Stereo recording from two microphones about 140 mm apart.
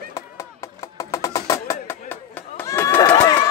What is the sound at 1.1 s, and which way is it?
Music, 20° left (ahead or behind).